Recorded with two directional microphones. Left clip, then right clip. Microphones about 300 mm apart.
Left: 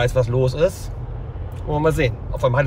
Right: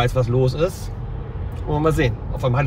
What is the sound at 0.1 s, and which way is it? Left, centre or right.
Speech, centre.